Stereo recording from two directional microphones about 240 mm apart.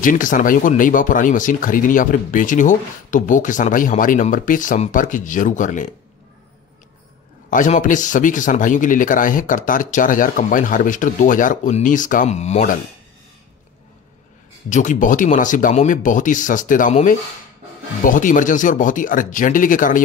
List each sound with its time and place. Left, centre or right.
0.0 s speech: left
7.4 s speech: left
14.7 s speech: left